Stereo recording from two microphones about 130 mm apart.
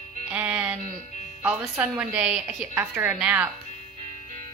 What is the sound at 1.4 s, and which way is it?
A woman's voice, 15° right (ahead or behind).